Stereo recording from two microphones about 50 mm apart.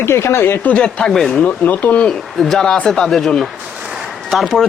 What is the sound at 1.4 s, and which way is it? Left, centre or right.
Speech, left.